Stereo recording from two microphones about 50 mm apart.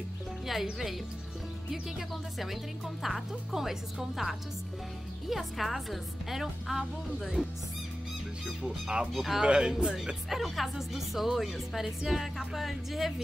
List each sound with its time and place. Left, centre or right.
0.5 s speech: centre
5.3 s speech: centre
8.6 s speech: centre
9.1 s speech: centre
9.4 s speech: centre
10.3 s speech: centre